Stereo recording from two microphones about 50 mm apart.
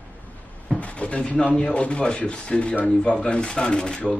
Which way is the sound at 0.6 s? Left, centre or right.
Left.